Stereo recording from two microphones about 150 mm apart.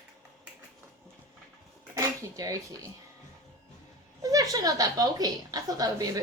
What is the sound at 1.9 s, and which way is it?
Dishes, 20° right (ahead or behind).